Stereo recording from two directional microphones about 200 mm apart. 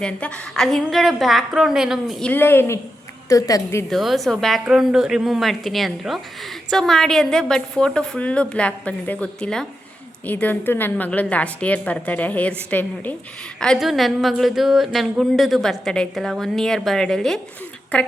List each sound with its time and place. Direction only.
0.0 s a woman's voice: 5° left (ahead or behind)
3.8 s a woman's voice: centre (ahead or behind)